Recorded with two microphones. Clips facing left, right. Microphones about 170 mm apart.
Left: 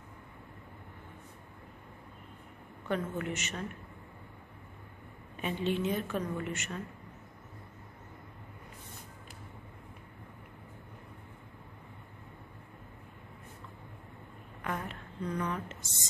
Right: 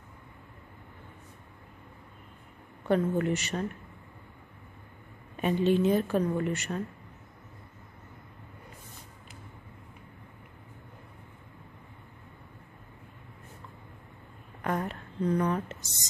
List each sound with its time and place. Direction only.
2.9 s a woman's voice: 35° right (ahead or behind)
5.4 s a woman's voice: 40° right (ahead or behind)
14.6 s a sound: 40° right (ahead or behind)